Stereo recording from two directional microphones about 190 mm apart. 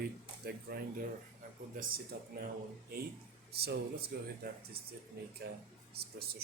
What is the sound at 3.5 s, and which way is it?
Speech, 55° right (ahead or behind).